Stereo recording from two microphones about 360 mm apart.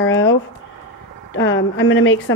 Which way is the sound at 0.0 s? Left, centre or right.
Left.